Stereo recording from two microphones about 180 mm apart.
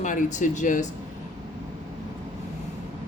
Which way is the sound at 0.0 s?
45° left (ahead or behind).